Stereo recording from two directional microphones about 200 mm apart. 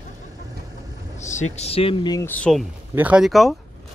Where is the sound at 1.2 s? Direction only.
35° left (ahead or behind); by 2.6 s 5° left (ahead or behind).